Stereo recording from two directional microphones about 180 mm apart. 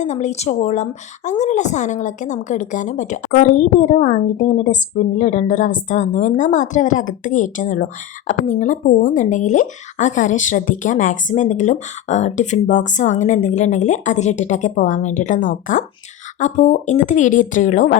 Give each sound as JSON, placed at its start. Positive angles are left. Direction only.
{"t": 0.0, "sound": "a woman's voice", "side_deg": 40}